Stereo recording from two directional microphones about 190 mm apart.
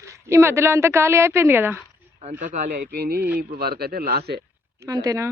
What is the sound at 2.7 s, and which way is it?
A man's voice, 55° right (ahead or behind).